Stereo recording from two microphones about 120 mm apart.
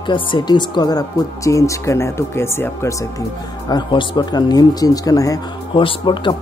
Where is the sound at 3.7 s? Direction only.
40° left (ahead or behind).